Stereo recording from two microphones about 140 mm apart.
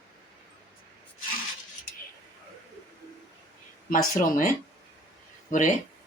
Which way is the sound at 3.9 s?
80° left.